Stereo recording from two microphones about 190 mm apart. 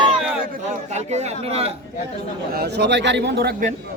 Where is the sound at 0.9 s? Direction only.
35° right (ahead or behind).